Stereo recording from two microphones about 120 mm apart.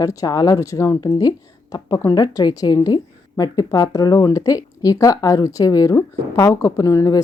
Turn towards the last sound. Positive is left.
turn(degrees=25)  # may be behind; listen again after turning